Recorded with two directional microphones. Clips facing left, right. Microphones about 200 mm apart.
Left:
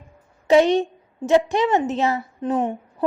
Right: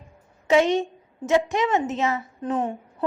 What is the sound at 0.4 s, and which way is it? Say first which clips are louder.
A woman's voice: left 4 dB; 35° left (ahead or behind).